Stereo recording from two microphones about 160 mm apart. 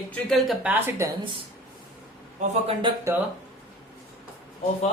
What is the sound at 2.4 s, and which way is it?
Speech, 45° right (ahead or behind).